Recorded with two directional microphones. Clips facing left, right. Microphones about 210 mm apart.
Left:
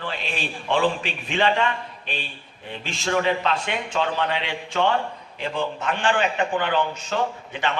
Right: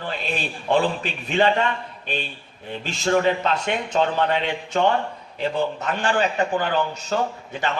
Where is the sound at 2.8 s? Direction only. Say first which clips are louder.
Right 3 dB; 40° right (ahead or behind).